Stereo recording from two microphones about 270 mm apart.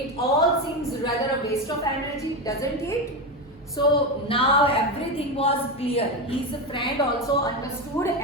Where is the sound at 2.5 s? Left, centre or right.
Centre.